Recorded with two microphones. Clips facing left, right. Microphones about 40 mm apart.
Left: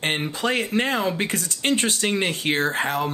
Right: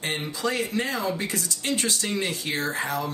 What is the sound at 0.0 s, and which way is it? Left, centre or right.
Speech, left.